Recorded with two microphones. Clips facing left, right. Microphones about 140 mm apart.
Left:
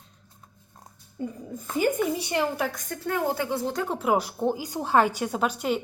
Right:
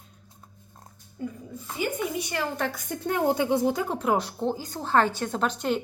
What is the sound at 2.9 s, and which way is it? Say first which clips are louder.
Speech: right 5 dB; 20° right (ahead or behind).